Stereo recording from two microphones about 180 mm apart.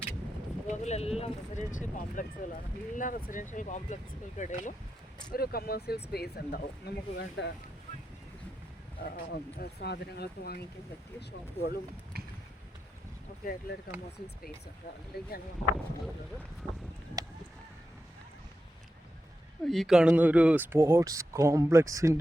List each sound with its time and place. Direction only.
0.8 s speech: 35° left (ahead or behind)
5.3 s speech: 55° left (ahead or behind); by 7.5 s 75° left (ahead or behind)
9.6 s speech: 65° left (ahead or behind)
12.1 s a sound: 60° right (ahead or behind)
13.4 s speech: 55° left (ahead or behind)
15.1 s speech: 60° left (ahead or behind)
17.2 s boat: 20° right (ahead or behind)
19.6 s speech: centre (ahead or behind); by 22.2 s 15° right (ahead or behind)